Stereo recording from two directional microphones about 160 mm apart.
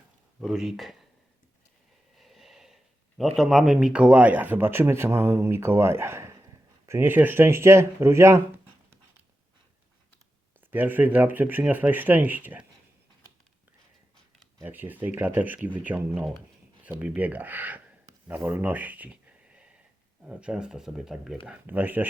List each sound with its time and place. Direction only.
0.3 s speech: 5° right (ahead or behind)
2.1 s snort: centre (ahead or behind)
3.2 s speech: centre (ahead or behind); by 8.4 s 15° right (ahead or behind)
10.6 s speech: 10° right (ahead or behind)
14.6 s speech: 10° right (ahead or behind)
16.8 s a sound: 10° right (ahead or behind)
20.2 s speech: 5° right (ahead or behind)